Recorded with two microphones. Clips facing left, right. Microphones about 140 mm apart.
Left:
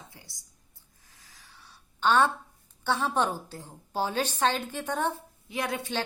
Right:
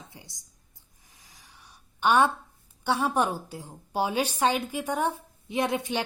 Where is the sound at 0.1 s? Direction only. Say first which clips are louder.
Right 4 dB; 20° right (ahead or behind).